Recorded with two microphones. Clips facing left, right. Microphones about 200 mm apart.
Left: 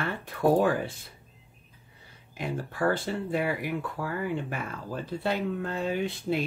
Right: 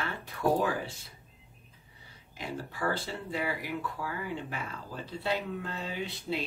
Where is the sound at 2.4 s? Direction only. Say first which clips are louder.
Left 6 dB; 55° left (ahead or behind).